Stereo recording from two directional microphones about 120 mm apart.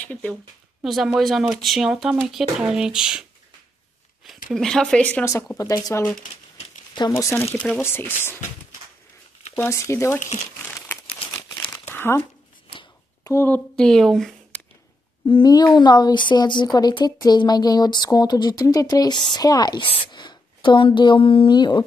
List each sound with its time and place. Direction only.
0.0 s speech: 10° left (ahead or behind)
0.8 s speech: 5° right (ahead or behind)
4.5 s speech: 5° left (ahead or behind)
5.2 s speech: 25° left (ahead or behind)
7.5 s speech: 10° left (ahead or behind)
7.8 s speech: 20° left (ahead or behind)
9.7 s speech: 25° left (ahead or behind)
10.6 s crumpling: 10° left (ahead or behind)
11.9 s speech: 20° left (ahead or behind)
13.7 s speech: 5° left (ahead or behind)
15.2 s speech: 40° left (ahead or behind)